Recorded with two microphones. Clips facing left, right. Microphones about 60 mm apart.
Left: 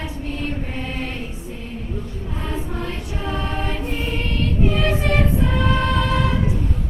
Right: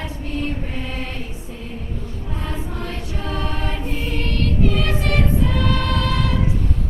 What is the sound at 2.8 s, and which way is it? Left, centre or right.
Choir, centre.